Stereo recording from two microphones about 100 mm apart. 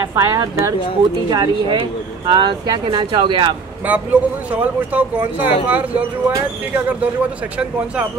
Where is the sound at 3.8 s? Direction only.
15° right (ahead or behind).